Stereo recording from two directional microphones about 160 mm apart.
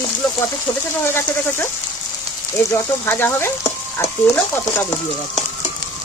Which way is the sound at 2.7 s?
15° left (ahead or behind).